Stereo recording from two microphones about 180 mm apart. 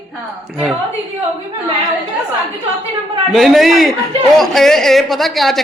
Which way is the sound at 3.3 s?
Centre (ahead or behind).